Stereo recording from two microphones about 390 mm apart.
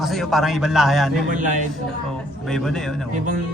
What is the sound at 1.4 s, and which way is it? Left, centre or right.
Speech, centre.